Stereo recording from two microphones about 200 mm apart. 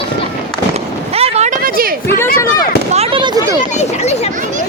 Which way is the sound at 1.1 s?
30° right (ahead or behind).